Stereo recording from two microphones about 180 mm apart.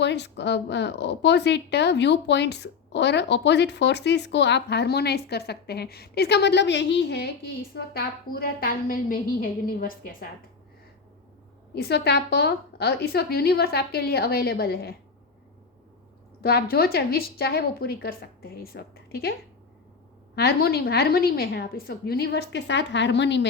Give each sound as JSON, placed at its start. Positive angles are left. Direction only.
{"t": 0.0, "sound": "speech", "side_deg": 75}
{"t": 7.8, "sound": "a woman's voice", "side_deg": 55}
{"t": 11.7, "sound": "a woman's voice", "side_deg": 65}
{"t": 16.4, "sound": "a woman's voice", "side_deg": 60}